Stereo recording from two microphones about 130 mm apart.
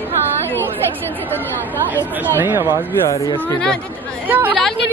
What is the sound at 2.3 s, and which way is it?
Speech, 15° right (ahead or behind).